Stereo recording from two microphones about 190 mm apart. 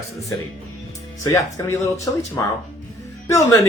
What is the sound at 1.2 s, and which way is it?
Speech, 15° left (ahead or behind).